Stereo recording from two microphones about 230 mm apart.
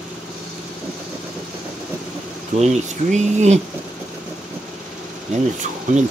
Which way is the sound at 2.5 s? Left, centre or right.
Right.